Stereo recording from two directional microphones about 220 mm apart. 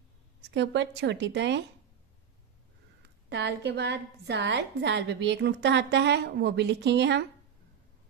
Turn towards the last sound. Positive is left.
turn(degrees=-50)  # may be behind; listen again after turning